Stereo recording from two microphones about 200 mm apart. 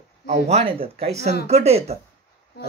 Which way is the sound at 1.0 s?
35° right (ahead or behind).